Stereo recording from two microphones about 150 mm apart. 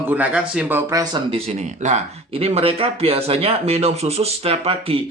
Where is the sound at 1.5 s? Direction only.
50° right (ahead or behind).